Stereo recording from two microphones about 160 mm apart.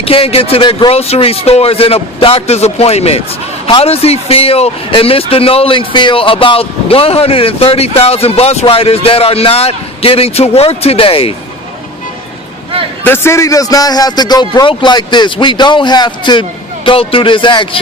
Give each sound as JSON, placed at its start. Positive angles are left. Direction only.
{"t": 0.0, "sound": "speech", "side_deg": 35}
{"t": 13.1, "sound": "a man's voice", "side_deg": 15}